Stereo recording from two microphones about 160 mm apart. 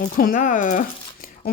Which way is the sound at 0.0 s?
55° left (ahead or behind).